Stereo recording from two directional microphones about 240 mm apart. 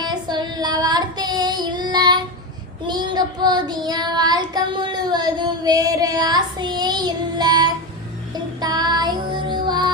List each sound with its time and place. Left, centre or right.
0.0 s child singing: centre
8.6 s music: centre